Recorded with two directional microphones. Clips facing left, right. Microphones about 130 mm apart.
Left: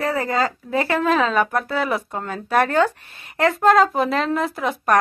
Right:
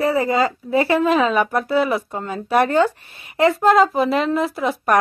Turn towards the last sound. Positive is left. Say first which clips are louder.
# right 2 dB
turn(degrees=0)  # may be behind; listen again after turning